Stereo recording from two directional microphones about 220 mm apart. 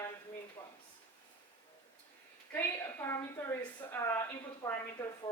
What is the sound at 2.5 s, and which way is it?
A woman's voice, 10° left (ahead or behind).